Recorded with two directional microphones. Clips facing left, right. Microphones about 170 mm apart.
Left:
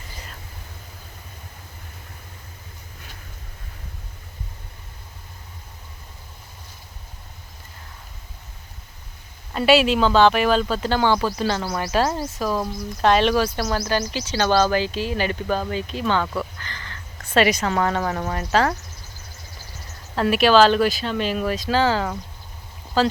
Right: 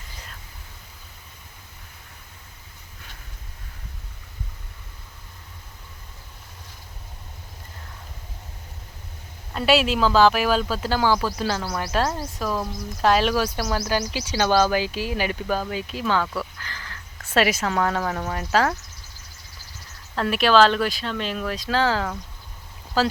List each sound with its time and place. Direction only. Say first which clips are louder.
9.5 s speech: left 3 dB; centre (ahead or behind)
20.1 s speech: left 2 dB; 5° left (ahead or behind)